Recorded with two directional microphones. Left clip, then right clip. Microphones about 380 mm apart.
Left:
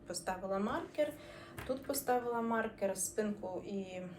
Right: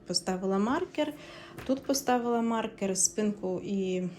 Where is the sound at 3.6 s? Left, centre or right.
Centre.